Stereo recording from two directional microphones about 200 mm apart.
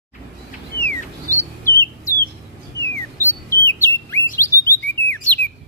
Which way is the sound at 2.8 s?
10° left (ahead or behind).